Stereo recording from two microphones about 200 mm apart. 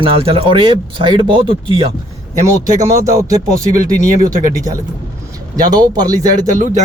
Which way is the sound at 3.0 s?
15° right (ahead or behind).